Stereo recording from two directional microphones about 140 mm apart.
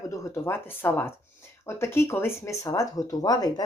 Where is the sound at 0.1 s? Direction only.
20° left (ahead or behind).